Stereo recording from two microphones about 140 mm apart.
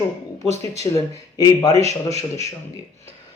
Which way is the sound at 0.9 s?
35° left (ahead or behind).